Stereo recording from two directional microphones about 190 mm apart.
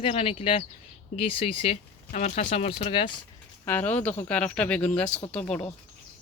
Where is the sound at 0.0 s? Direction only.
30° left (ahead or behind).